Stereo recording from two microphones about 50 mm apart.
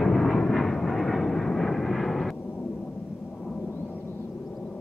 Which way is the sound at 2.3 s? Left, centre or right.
Left.